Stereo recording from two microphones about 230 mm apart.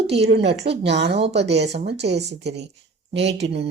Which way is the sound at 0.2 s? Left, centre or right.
Right.